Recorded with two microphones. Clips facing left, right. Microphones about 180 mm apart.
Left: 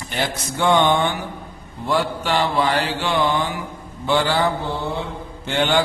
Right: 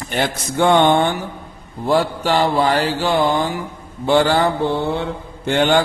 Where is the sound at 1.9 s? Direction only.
40° right (ahead or behind).